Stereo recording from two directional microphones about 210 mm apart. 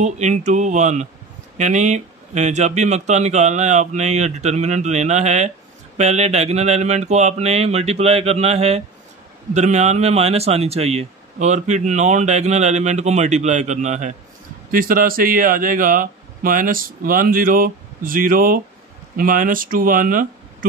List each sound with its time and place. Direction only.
0.0 s speech: 35° right (ahead or behind)